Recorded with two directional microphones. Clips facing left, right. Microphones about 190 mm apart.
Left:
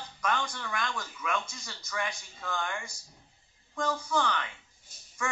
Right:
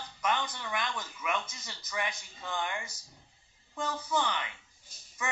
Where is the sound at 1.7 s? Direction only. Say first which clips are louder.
Left 1 dB; 20° right (ahead or behind).